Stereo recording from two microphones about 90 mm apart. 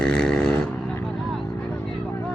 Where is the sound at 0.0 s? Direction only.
5° left (ahead or behind).